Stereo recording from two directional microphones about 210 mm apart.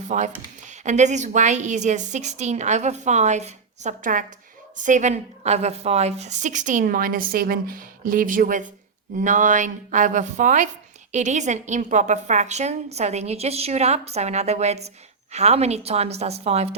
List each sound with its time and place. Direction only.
0.1 s a woman's voice: 35° right (ahead or behind)